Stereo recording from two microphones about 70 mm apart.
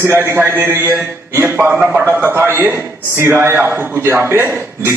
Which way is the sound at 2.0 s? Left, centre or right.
Right.